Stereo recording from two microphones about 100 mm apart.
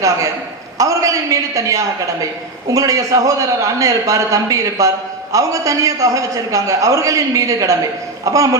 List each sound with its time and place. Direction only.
0.8 s a man's voice: 35° right (ahead or behind)